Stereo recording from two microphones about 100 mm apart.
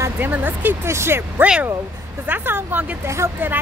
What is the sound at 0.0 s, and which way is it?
Speech, 20° right (ahead or behind).